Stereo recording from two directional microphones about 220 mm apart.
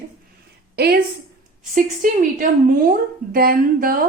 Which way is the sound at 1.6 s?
35° right (ahead or behind).